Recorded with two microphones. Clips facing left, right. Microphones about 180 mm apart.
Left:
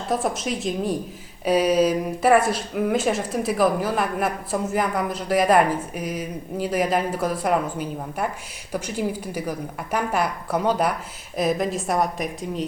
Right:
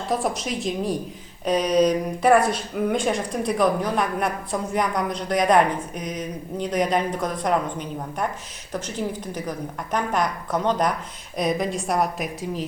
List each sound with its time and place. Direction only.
0.1 s speech: centre (ahead or behind)